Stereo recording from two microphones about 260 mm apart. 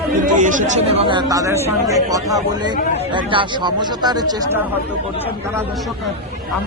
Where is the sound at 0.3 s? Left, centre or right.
Right.